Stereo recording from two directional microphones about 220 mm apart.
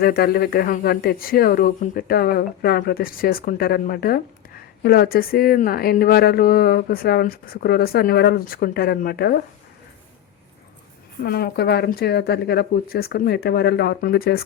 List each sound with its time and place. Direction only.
0.0 s speech: 45° left (ahead or behind)
11.2 s speech: 45° left (ahead or behind)